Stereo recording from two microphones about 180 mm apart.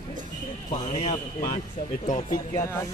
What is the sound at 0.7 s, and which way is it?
Speech, 40° left (ahead or behind).